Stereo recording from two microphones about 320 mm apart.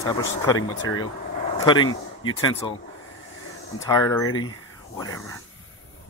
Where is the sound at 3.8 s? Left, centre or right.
Centre.